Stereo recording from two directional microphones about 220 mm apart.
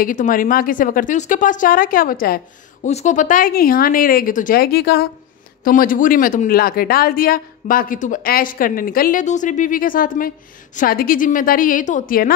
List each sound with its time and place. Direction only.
0.0 s a woman's voice: 35° left (ahead or behind)